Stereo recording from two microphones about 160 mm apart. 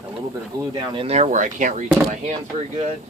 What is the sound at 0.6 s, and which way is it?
Speech, 30° right (ahead or behind).